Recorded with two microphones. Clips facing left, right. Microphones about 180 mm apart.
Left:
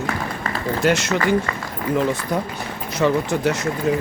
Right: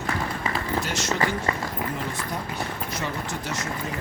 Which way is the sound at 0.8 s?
65° left (ahead or behind).